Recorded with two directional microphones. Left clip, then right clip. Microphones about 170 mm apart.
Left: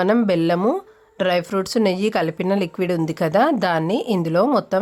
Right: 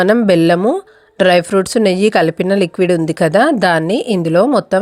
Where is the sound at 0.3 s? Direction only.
25° right (ahead or behind).